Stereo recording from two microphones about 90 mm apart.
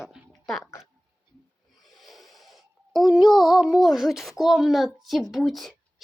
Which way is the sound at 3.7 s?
40° left (ahead or behind).